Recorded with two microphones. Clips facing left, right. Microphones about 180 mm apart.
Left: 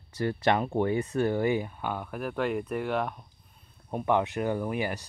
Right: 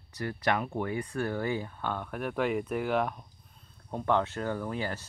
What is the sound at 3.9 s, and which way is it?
Speech, 15° left (ahead or behind).